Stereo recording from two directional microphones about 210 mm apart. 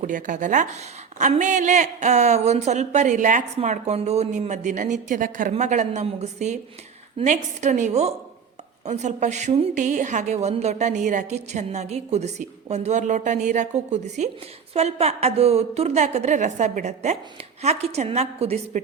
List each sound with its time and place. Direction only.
0.0 s speech: 40° right (ahead or behind)